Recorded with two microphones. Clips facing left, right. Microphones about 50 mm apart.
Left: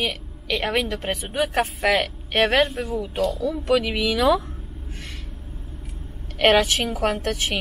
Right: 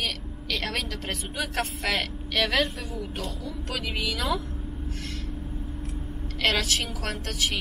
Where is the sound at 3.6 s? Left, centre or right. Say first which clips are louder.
Left 10 dB; left.